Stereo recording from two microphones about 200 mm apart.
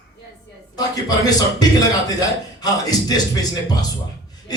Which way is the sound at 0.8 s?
20° left (ahead or behind).